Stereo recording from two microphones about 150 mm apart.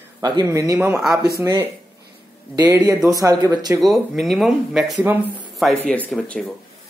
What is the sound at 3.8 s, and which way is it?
Speech, centre (ahead or behind).